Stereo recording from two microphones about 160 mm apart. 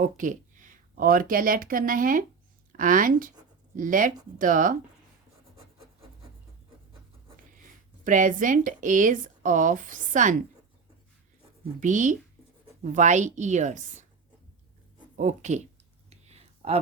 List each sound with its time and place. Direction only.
0.0 s speech: 55° right (ahead or behind)
8.0 s speech: 55° right (ahead or behind)
11.8 s a woman's voice: 50° right (ahead or behind)
15.1 s a woman's voice: 50° right (ahead or behind)
16.0 s a sound: 40° right (ahead or behind)